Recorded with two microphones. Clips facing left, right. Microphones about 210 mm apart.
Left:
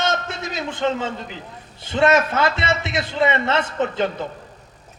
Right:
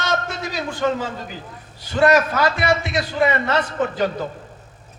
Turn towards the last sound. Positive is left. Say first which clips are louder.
# even
turn(degrees=25)  # may be behind; listen again after turning